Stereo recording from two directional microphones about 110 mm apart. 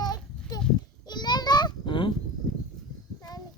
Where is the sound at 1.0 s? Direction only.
40° left (ahead or behind).